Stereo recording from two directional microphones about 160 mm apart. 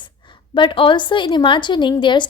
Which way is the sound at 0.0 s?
30° left (ahead or behind).